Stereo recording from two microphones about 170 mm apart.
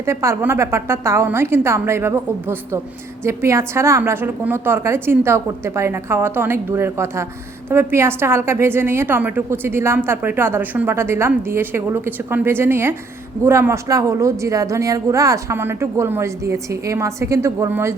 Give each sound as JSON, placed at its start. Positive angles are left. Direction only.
{"t": 0.0, "sound": "a woman's voice", "side_deg": -15}